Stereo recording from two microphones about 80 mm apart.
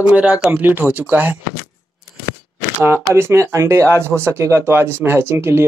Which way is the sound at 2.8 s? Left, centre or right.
Right.